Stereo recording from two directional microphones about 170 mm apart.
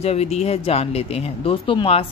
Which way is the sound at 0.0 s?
40° left (ahead or behind).